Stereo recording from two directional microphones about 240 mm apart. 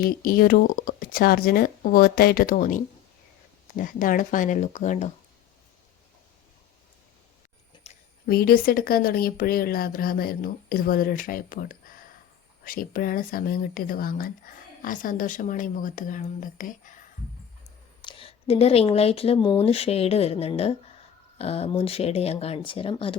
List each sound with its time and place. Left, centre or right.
0.0 s speech: left
7.9 s a sound: left
8.3 s speech: left
18.0 s speech: left